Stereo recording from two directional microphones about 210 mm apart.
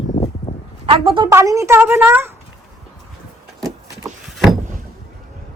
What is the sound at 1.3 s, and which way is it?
A woman's voice, 15° right (ahead or behind).